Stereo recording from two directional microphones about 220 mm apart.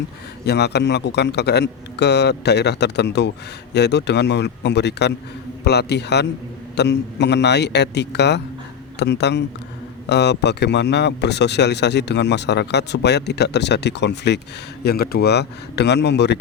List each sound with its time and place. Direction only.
0.4 s a man's voice: 50° left (ahead or behind)